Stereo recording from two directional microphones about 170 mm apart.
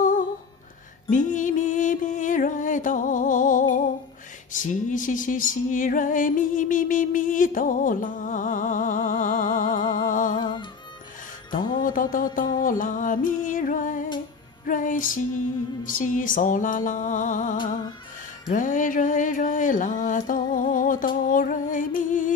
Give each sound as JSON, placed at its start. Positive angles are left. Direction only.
{"t": 1.1, "sound": "music", "side_deg": 50}
{"t": 11.8, "sound": "music", "side_deg": 55}